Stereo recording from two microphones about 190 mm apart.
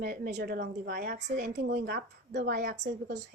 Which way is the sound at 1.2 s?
40° right (ahead or behind).